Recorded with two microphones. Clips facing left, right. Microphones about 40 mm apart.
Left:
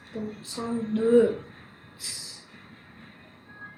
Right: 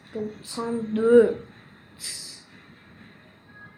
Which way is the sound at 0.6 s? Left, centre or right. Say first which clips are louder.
Right 3 dB; centre.